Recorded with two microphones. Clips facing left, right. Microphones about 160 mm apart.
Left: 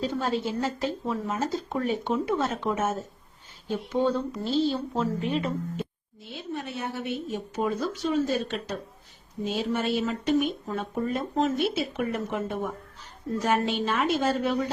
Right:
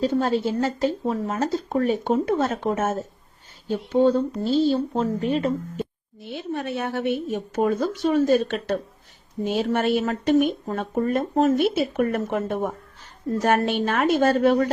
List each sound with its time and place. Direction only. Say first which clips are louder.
0.0 s speech: right 6 dB; 40° right (ahead or behind)
4.0 s speech: right 8 dB; 30° right (ahead or behind)
6.3 s speech: right 6 dB; 65° right (ahead or behind)